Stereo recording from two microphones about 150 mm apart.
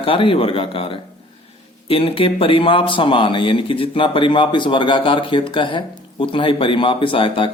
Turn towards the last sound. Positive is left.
turn(degrees=35)  # may be behind; listen again after turning